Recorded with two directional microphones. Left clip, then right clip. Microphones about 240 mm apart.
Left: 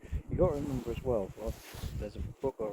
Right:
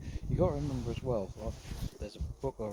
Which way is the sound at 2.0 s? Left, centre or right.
Right.